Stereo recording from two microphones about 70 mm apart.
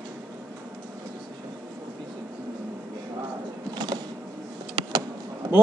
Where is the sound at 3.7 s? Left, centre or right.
Right.